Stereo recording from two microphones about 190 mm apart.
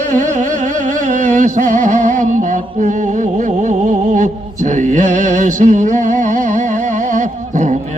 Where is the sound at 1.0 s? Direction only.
40° right (ahead or behind).